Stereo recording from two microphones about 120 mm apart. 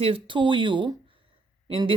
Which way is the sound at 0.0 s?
45° right (ahead or behind).